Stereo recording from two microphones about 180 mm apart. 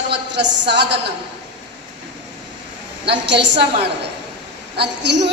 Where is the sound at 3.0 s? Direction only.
75° right (ahead or behind).